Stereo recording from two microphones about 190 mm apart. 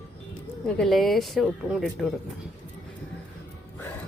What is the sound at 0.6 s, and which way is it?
Speech, 5° left (ahead or behind).